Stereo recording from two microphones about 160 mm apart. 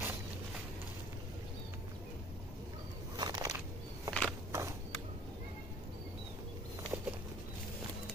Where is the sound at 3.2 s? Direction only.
25° right (ahead or behind).